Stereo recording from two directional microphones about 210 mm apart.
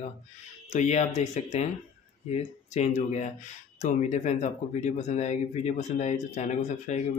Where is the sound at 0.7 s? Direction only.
30° left (ahead or behind).